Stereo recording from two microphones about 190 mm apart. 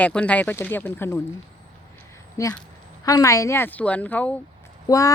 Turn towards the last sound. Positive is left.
turn(degrees=20)  # may be behind; listen again after turning